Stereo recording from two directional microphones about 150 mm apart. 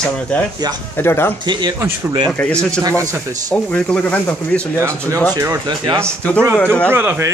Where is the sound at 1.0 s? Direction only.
15° left (ahead or behind).